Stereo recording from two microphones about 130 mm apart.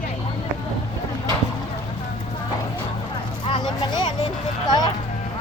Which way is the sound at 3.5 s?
35° left (ahead or behind).